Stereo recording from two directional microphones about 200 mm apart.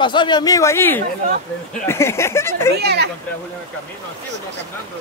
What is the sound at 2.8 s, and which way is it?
Speech, 55° right (ahead or behind).